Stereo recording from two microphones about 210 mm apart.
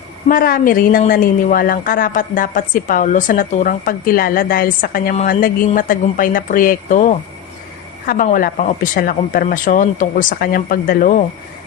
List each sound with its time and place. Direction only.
0.3 s a woman's voice: 40° left (ahead or behind)